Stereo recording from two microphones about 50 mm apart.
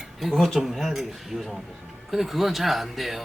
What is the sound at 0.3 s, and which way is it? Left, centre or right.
Speech, centre.